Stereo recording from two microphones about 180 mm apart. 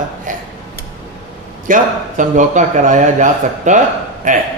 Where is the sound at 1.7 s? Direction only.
45° right (ahead or behind).